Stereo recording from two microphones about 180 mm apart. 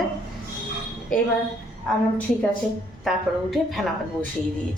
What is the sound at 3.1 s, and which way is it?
Speech, centre (ahead or behind).